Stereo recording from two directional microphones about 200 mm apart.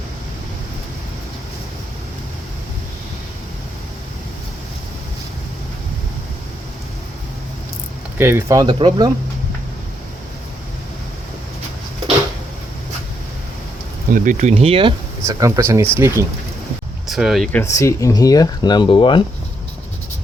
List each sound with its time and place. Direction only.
8.2 s speech: 10° right (ahead or behind)
14.1 s speech: 40° right (ahead or behind)
15.3 s speech: 15° right (ahead or behind)
17.1 s speech: centre (ahead or behind)
17.6 s speech: 15° left (ahead or behind)